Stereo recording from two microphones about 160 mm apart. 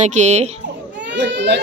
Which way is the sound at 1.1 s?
90° right.